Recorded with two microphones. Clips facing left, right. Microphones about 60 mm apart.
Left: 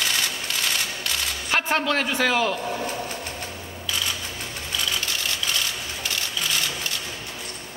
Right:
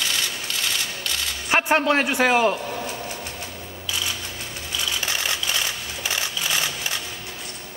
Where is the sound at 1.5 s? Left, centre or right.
Centre.